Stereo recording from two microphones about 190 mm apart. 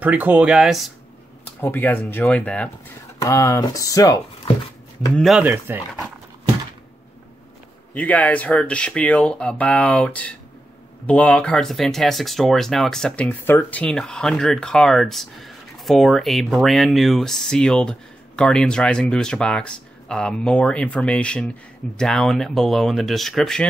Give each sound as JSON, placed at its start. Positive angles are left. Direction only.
{"t": 0.0, "sound": "speech", "side_deg": -10}
{"t": 1.6, "sound": "speech", "side_deg": 10}
{"t": 5.1, "sound": "speech", "side_deg": 0}
{"t": 7.9, "sound": "speech", "side_deg": 10}